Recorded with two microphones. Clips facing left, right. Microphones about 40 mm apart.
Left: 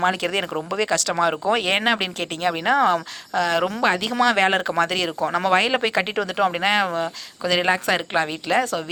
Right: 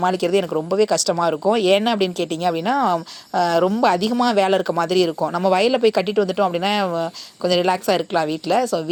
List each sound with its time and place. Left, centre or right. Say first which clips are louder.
0.0 s speech: right 3 dB; left
3.3 s speech: right 4 dB; left
5.2 s speech: right 2 dB; left